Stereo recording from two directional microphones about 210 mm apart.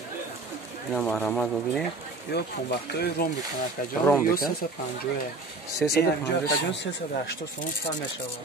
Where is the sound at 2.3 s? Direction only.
50° left (ahead or behind).